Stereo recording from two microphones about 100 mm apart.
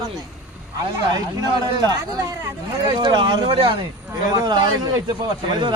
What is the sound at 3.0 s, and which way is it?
Speech, 50° right (ahead or behind).